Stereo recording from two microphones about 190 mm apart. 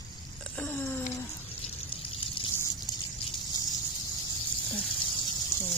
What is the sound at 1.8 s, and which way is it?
Water, 30° left (ahead or behind).